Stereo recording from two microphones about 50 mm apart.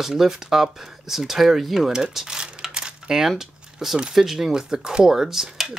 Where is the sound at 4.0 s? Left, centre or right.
Centre.